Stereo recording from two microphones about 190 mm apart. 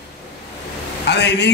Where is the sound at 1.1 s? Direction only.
65° left (ahead or behind).